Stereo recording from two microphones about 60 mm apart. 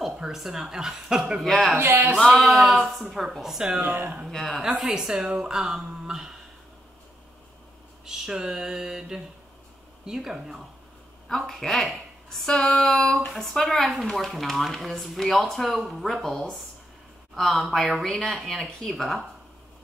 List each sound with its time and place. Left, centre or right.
0.0 s a woman's voice: centre
1.4 s speech: centre
1.8 s music: right
2.3 s a woman's voice: centre
4.3 s speech: centre
4.7 s a woman's voice: centre
5.3 s a sound: centre
8.0 s a woman's voice: centre
11.2 s speech: centre